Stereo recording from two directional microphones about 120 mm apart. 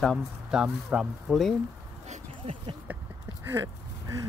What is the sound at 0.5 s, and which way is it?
Speech, 5° right (ahead or behind).